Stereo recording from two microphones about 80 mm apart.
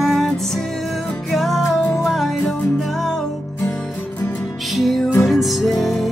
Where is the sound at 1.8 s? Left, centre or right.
Left.